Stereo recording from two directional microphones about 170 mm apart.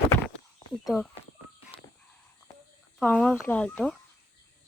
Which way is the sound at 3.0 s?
5° left (ahead or behind).